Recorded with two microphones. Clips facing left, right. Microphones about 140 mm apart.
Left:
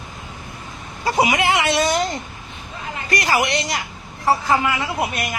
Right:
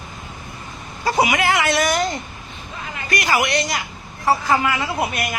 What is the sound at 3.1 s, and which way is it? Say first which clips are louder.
Speech: even; 30° left (ahead or behind).